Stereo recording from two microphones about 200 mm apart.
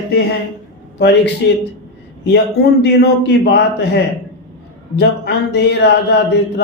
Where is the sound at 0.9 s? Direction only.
60° left (ahead or behind).